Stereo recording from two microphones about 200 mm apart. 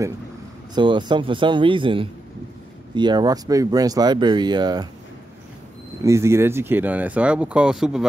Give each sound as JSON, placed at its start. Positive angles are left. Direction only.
{"t": 0.7, "sound": "speech", "side_deg": -20}
{"t": 6.0, "sound": "speech", "side_deg": -15}